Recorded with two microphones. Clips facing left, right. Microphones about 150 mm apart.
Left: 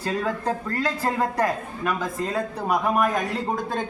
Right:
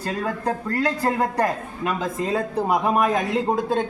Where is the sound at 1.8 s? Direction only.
25° right (ahead or behind).